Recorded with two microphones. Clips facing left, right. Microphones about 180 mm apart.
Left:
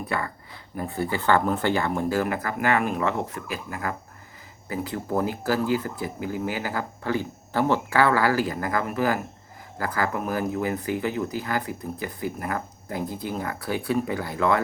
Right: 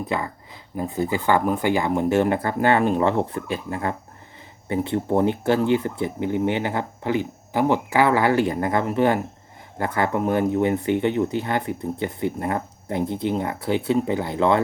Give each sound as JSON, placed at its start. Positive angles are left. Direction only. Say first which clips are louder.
{"t": 0.1, "sound": "speech", "louder": "right 3 dB", "side_deg": -20}